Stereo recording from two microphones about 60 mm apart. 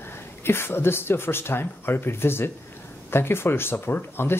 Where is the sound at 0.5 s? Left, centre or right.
Left.